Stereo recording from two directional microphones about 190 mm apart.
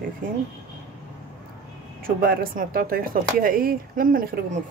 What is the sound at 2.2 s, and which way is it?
Speech, 50° right (ahead or behind).